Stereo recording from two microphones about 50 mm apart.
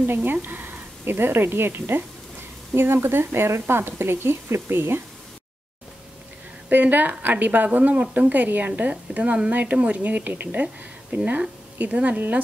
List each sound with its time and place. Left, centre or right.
0.0 s speech: right
6.7 s a woman's voice: right
9.5 s a woman's voice: right